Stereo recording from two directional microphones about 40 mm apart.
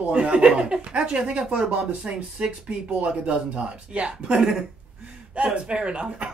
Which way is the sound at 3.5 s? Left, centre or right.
Right.